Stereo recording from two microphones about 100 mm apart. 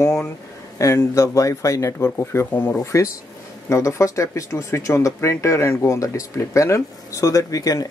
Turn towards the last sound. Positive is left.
turn(degrees=35)  # may be behind; listen again after turning